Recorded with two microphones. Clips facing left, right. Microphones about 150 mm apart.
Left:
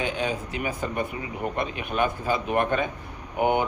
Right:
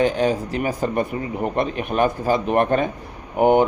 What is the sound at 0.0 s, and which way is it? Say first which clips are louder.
Speech: right 9 dB; 40° right (ahead or behind).